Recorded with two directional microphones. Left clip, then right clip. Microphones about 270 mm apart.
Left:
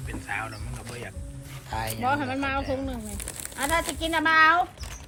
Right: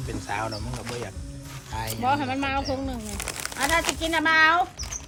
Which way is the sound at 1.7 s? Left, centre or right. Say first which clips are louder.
Right 1 dB; centre.